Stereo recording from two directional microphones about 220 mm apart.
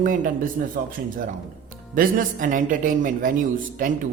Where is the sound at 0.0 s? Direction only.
35° right (ahead or behind).